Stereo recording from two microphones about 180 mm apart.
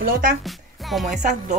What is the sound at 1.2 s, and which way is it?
Speech, 40° right (ahead or behind).